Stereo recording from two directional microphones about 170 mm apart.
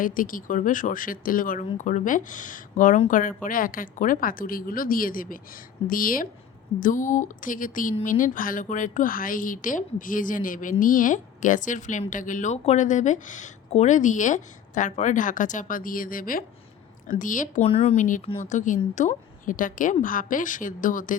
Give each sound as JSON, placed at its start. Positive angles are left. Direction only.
{"t": 0.0, "sound": "a woman's voice", "side_deg": 55}
{"t": 17.7, "sound": "speech", "side_deg": 40}